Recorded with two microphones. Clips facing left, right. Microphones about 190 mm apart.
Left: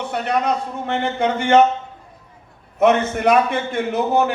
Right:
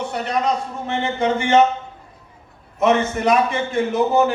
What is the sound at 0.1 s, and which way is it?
A man's voice, 60° left (ahead or behind).